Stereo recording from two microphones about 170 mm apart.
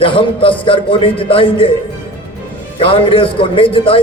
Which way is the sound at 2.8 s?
30° left (ahead or behind).